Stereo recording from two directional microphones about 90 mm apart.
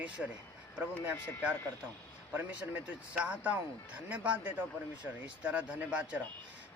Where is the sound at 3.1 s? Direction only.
15° right (ahead or behind).